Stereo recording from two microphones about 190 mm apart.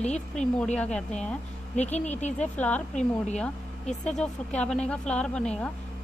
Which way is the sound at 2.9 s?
40° left (ahead or behind).